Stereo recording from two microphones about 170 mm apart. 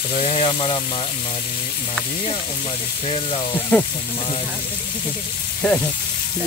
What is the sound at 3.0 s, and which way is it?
Speech, 35° left (ahead or behind).